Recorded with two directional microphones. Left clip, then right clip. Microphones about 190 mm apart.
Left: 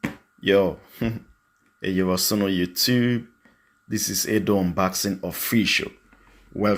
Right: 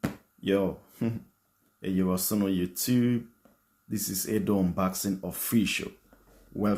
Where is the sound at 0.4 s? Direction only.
25° left (ahead or behind).